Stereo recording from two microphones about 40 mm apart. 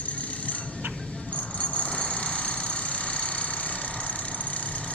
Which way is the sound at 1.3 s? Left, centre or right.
Left.